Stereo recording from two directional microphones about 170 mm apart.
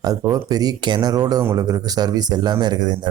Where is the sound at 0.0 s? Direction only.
20° right (ahead or behind).